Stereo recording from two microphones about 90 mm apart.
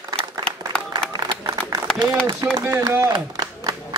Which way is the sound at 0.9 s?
45° right (ahead or behind).